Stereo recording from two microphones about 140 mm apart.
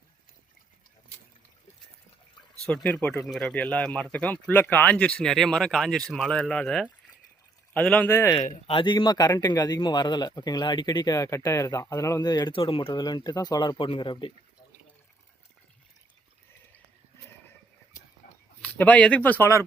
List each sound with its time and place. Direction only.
2.6 s speech: 10° left (ahead or behind)
3.2 s speech: centre (ahead or behind); by 8.4 s 20° left (ahead or behind)
8.6 s speech: 35° left (ahead or behind)
13.0 s speech: 30° left (ahead or behind)
18.7 s speech: 10° left (ahead or behind)